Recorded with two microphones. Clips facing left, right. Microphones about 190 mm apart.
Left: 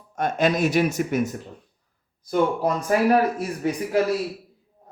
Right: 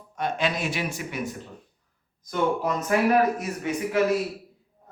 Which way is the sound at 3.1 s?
30° left (ahead or behind).